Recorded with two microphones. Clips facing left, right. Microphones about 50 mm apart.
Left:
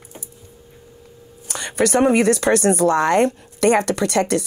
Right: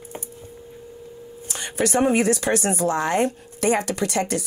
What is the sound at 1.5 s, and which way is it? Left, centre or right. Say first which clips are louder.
A woman's voice: left 4 dB; left.